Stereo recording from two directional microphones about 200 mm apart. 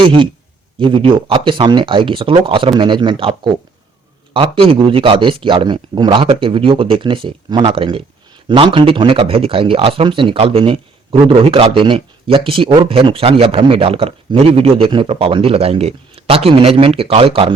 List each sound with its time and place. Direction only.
0.0 s a man's voice: 25° right (ahead or behind)